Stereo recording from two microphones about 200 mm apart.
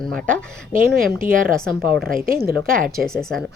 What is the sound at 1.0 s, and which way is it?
Speech, 45° right (ahead or behind).